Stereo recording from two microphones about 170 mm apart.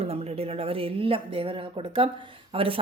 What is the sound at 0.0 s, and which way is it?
A woman's voice, 35° right (ahead or behind).